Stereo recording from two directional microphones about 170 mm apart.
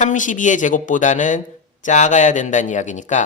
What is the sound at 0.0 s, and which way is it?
A man's voice, 50° left (ahead or behind).